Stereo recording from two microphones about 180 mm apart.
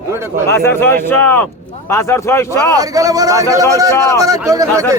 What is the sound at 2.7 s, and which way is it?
A man's voice, 20° right (ahead or behind).